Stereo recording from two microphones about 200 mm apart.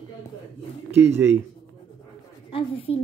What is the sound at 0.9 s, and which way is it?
Speech, 10° right (ahead or behind).